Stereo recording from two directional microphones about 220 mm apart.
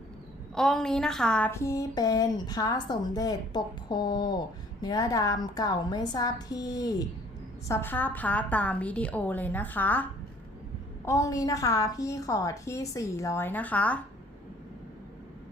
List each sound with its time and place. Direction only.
0.5 s a woman's voice: centre (ahead or behind)